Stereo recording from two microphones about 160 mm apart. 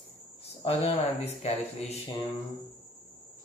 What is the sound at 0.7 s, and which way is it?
Speech, 40° left (ahead or behind).